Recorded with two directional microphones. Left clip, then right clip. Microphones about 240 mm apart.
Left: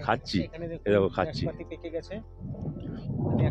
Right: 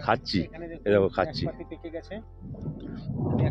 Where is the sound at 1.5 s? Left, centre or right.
Centre.